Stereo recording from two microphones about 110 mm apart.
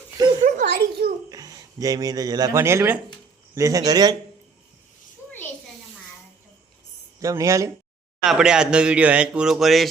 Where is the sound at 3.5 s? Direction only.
30° right (ahead or behind).